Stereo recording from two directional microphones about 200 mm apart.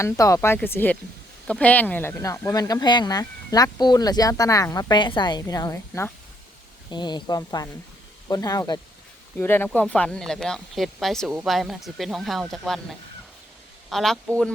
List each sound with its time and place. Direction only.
0.0 s speech: 15° left (ahead or behind)